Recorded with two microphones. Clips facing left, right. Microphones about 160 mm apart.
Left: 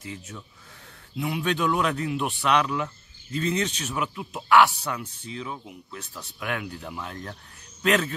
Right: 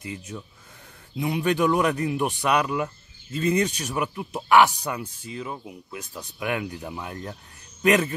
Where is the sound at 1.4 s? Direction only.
10° right (ahead or behind).